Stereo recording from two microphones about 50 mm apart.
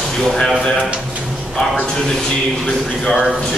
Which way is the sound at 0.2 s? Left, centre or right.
Centre.